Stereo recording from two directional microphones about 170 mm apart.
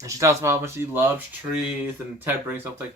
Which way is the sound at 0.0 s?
20° right (ahead or behind).